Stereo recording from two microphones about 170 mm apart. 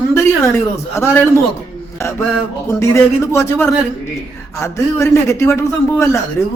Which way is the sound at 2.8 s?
15° left (ahead or behind).